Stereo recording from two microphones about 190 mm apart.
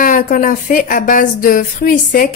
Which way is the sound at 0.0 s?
45° left (ahead or behind).